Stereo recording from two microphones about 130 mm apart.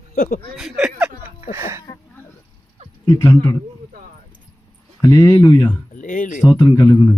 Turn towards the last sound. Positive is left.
turn(degrees=25)  # may be behind; listen again after turning